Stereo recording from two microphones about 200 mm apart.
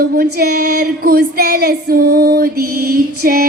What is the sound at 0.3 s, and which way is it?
Female singing, 50° right (ahead or behind).